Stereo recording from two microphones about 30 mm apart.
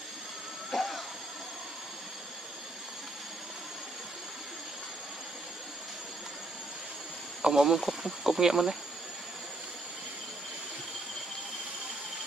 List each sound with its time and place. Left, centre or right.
0.7 s vehicle: centre
7.4 s speech: centre